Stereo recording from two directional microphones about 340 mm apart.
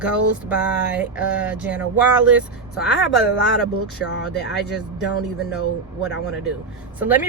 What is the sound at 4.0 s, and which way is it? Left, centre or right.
Speech, left.